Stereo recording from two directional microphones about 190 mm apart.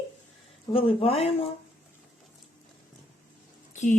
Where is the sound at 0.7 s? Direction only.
30° left (ahead or behind).